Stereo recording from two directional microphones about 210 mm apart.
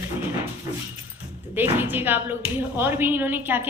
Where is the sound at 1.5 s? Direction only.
10° right (ahead or behind).